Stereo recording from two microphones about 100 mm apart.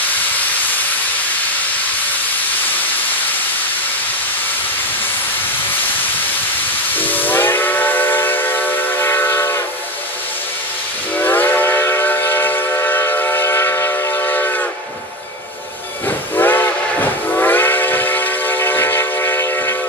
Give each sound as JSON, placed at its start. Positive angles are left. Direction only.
{"t": 7.0, "sound": "steam whistle", "side_deg": 20}
{"t": 11.1, "sound": "steam whistle", "side_deg": 20}
{"t": 16.3, "sound": "steam whistle", "side_deg": 20}